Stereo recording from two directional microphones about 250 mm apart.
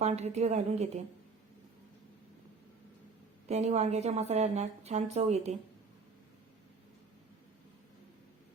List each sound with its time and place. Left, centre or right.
0.0 s a woman's voice: right
3.5 s a woman's voice: right